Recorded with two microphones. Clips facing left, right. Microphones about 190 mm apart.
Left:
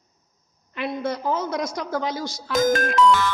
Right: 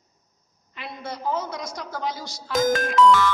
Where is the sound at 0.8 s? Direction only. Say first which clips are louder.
Left 8 dB; 80° left.